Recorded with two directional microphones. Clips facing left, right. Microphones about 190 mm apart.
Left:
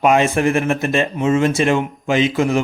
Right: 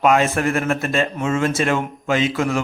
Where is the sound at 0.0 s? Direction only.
20° left (ahead or behind).